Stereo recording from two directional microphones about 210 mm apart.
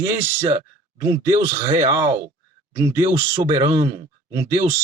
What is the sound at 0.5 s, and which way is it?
Speech, 20° right (ahead or behind).